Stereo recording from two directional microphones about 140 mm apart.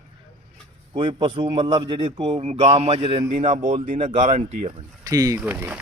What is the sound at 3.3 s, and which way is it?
Speech, 65° right (ahead or behind).